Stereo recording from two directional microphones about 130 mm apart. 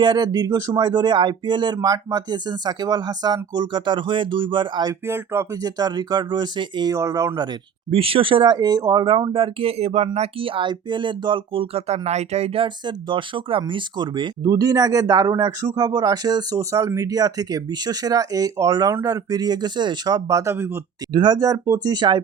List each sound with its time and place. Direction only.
0.0 s speech: 30° right (ahead or behind)
5.0 s speech: 20° right (ahead or behind)
5.7 s speech: 35° right (ahead or behind)
7.9 s speech: 45° right (ahead or behind); by 9.0 s 25° right (ahead or behind)
9.0 s speech: 40° right (ahead or behind); by 12.6 s 55° right (ahead or behind)
12.6 s speech: 35° right (ahead or behind); by 20.7 s 20° right (ahead or behind)
21.1 s speech: 35° right (ahead or behind)